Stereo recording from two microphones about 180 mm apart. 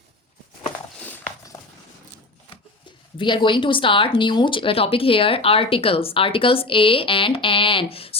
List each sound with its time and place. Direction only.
3.2 s speech: 25° left (ahead or behind)